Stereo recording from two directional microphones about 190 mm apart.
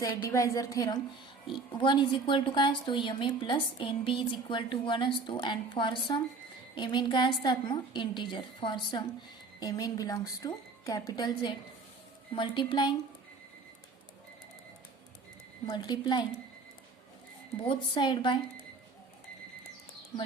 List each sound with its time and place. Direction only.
0.0 s a woman's voice: 15° left (ahead or behind)
15.7 s a woman's voice: 25° left (ahead or behind)
17.6 s a woman's voice: 25° left (ahead or behind)